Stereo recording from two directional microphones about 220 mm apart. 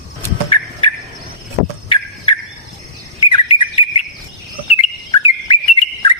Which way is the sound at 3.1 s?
25° left (ahead or behind).